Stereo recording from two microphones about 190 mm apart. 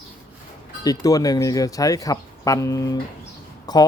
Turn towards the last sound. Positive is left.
turn(degrees=20)  # may be behind; listen again after turning